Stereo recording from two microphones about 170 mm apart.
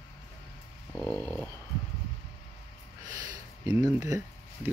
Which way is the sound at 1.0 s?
10° left (ahead or behind).